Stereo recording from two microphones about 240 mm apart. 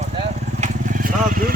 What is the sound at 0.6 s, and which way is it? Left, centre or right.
Vehicle, right.